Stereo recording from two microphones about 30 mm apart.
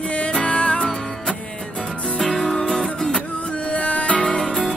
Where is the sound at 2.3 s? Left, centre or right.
Left.